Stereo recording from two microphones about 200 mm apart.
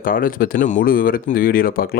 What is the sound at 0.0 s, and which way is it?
Speech, 45° left (ahead or behind).